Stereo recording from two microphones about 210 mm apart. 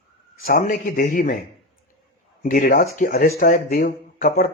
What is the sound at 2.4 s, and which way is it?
Speech, 40° left (ahead or behind).